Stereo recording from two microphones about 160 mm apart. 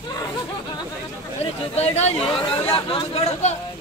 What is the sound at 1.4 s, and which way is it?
Speech, 40° left (ahead or behind).